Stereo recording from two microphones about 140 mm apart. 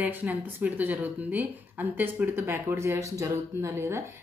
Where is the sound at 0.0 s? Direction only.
10° right (ahead or behind).